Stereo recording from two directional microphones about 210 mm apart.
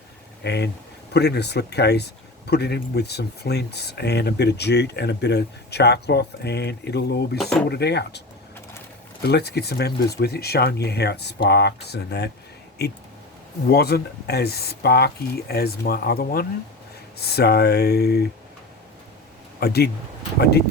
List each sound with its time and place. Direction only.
0.4 s speech: 50° left (ahead or behind)
9.2 s speech: 50° left (ahead or behind)
19.5 s speech: 50° left (ahead or behind)